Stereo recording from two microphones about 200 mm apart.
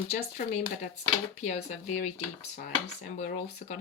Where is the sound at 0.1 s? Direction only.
35° left (ahead or behind).